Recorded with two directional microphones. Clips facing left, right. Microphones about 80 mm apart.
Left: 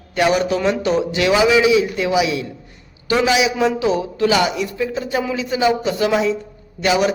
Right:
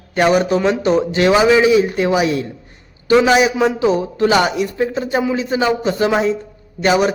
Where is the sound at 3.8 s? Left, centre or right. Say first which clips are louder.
Right 3 dB; right.